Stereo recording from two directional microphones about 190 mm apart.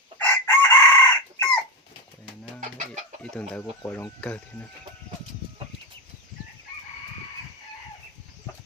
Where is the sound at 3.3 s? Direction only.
10° left (ahead or behind).